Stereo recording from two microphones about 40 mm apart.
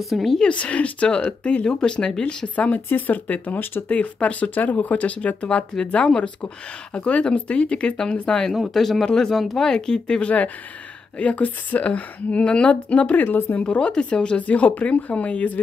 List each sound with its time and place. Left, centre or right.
0.1 s speech: centre
0.5 s a woman's voice: left
2.4 s a woman's voice: left
8.7 s speech: centre
9.0 s speech: centre
9.6 s speech: centre
11.1 s a woman's voice: left
13.1 s speech: left
13.7 s speech: left
14.4 s a woman's voice: left